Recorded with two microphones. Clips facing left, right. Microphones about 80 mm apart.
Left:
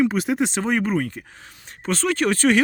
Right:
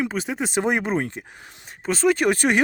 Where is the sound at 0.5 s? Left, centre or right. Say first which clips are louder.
Even; centre.